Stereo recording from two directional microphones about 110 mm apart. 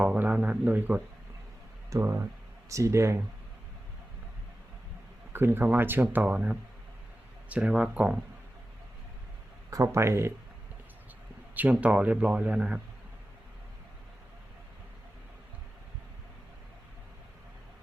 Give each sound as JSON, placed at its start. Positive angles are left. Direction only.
{"t": 0.0, "sound": "speech", "side_deg": -10}
{"t": 5.3, "sound": "speech", "side_deg": -20}
{"t": 9.6, "sound": "speech", "side_deg": -30}
{"t": 11.5, "sound": "speech", "side_deg": -15}